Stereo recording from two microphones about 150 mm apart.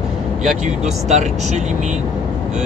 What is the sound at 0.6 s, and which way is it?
Speech, 50° right (ahead or behind).